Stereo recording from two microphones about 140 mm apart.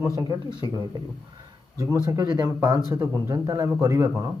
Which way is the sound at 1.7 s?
25° right (ahead or behind).